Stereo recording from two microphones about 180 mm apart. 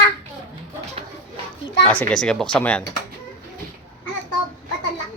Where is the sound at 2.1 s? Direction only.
5° left (ahead or behind).